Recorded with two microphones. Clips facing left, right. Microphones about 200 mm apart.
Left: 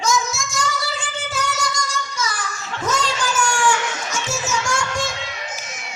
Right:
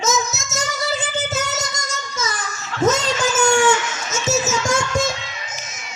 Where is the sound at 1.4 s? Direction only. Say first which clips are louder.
Even; 20° right (ahead or behind).